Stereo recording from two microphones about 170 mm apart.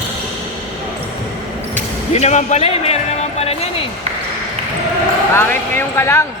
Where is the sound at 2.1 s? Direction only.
40° left (ahead or behind).